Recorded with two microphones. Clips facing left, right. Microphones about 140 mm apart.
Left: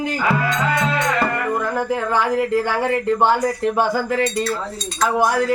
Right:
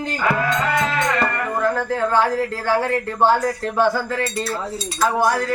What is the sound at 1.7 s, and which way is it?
Speech, 15° left (ahead or behind).